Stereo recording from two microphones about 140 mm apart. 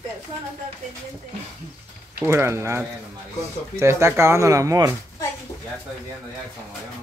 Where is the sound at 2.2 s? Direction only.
20° right (ahead or behind).